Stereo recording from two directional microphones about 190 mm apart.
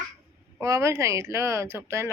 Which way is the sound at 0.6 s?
15° right (ahead or behind).